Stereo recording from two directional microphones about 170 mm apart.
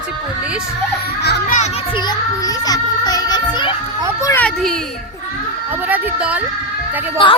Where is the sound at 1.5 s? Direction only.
40° left (ahead or behind).